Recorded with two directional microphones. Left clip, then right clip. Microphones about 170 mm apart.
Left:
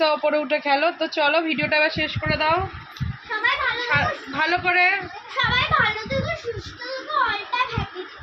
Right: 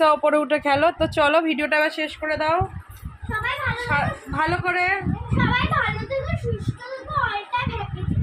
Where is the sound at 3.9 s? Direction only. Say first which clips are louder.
Left 2 dB; 15° right (ahead or behind).